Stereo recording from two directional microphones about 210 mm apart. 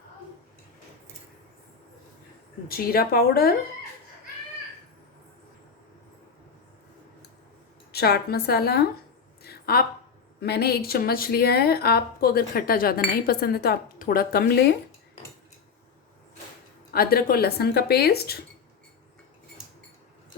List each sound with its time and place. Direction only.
2.6 s a woman's voice: 45° left (ahead or behind)
7.9 s a woman's voice: 50° left (ahead or behind)
9.4 s a sound: 45° left (ahead or behind)
10.4 s a woman's voice: 50° left (ahead or behind)
16.9 s a woman's voice: 45° left (ahead or behind)